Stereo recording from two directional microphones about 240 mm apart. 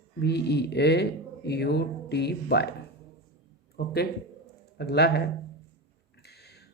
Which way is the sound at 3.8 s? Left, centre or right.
Left.